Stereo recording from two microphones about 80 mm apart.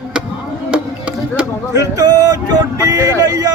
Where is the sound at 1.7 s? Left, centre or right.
Right.